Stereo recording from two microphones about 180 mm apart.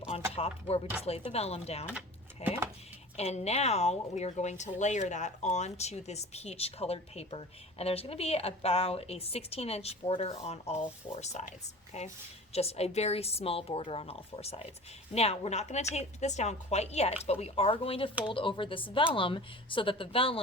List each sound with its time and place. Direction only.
0.3 s speech: 35° left (ahead or behind)